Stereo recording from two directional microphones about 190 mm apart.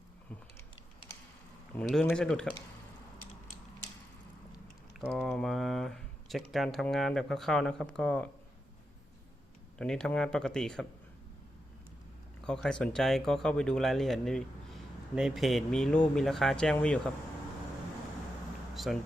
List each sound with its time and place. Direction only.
1.8 s speech: centre (ahead or behind)
4.9 s speech: centre (ahead or behind)
9.7 s speech: 5° left (ahead or behind)
12.4 s speech: 5° left (ahead or behind)
18.7 s a sound: centre (ahead or behind)